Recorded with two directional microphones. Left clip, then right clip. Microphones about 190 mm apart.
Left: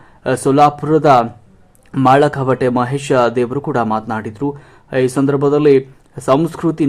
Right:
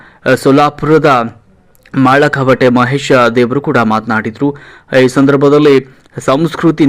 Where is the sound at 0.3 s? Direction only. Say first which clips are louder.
Right 3 dB; 10° right (ahead or behind).